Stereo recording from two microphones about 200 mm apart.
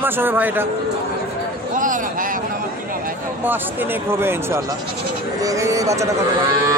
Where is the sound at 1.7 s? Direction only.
40° right (ahead or behind).